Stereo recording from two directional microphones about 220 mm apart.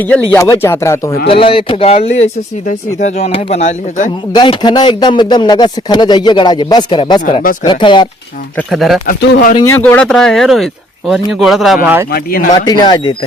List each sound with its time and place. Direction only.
0.0 s speech: 5° left (ahead or behind)
1.3 s speech: 25° left (ahead or behind)
4.3 s speech: 20° left (ahead or behind)
7.3 s speech: 35° left (ahead or behind)
7.6 s speech: 20° left (ahead or behind)
8.5 s speech: centre (ahead or behind)
9.2 s speech: 40° left (ahead or behind)
9.8 s speech: 5° left (ahead or behind)
12.1 s speech: 40° left (ahead or behind)
12.6 s speech: 20° left (ahead or behind)